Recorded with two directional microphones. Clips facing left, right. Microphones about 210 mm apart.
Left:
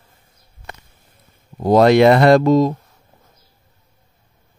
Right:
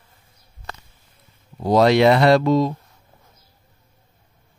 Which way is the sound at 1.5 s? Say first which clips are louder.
Left 4 dB; 50° left (ahead or behind).